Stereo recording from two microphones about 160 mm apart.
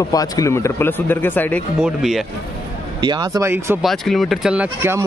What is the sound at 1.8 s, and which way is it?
Speech, centre (ahead or behind).